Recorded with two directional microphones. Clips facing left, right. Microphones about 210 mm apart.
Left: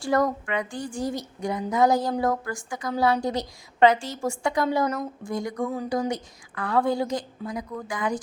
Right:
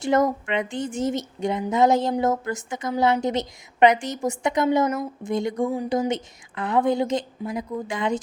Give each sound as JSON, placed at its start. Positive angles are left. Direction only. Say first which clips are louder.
{"t": 0.0, "sound": "speech", "louder": "right 3 dB", "side_deg": -20}